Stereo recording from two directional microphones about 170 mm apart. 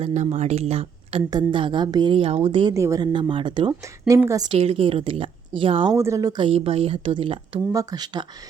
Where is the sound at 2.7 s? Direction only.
20° right (ahead or behind).